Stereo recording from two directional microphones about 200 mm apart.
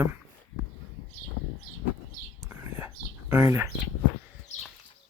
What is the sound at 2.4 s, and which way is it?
Whispering, 10° right (ahead or behind).